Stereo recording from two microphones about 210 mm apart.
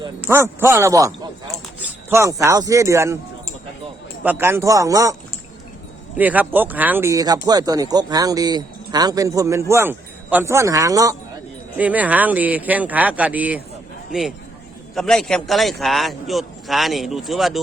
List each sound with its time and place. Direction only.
0.2 s speech: 10° right (ahead or behind)
4.2 s speech: 10° right (ahead or behind)
6.1 s a man's voice: 5° right (ahead or behind)